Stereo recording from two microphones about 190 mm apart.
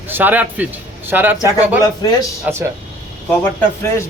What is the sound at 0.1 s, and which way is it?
Speech, 10° right (ahead or behind).